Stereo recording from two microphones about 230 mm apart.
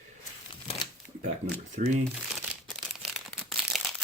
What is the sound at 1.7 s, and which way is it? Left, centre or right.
Speech, right.